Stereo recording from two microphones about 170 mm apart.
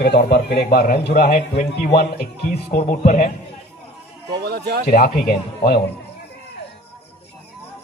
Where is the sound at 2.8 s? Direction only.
45° left (ahead or behind).